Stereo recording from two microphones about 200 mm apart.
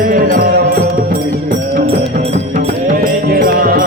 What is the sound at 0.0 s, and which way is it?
Music, 45° right (ahead or behind).